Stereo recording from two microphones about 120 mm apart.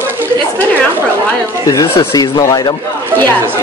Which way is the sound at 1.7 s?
25° left (ahead or behind).